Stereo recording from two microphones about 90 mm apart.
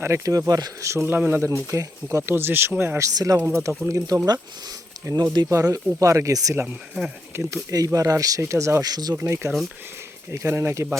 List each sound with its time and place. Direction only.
0.0 s speech: 35° right (ahead or behind)
3.0 s speech: 40° right (ahead or behind)
3.3 s speech: 25° right (ahead or behind)
3.8 s speech: 40° right (ahead or behind)
5.5 s speech: 40° right (ahead or behind)
6.5 s speech: 25° right (ahead or behind)
7.3 s speech: 35° right (ahead or behind)
9.2 s speech: 35° right (ahead or behind)